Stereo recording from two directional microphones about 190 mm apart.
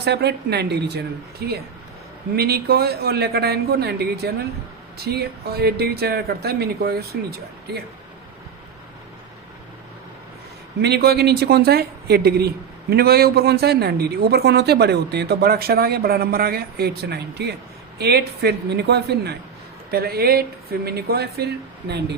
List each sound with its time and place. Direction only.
0.0 s speech: 60° right (ahead or behind)
10.8 s speech: 60° right (ahead or behind)